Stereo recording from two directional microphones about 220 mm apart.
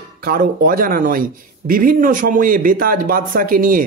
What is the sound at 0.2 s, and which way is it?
Speech, 40° right (ahead or behind).